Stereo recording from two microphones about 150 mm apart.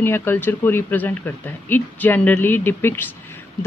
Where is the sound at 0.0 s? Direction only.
15° left (ahead or behind).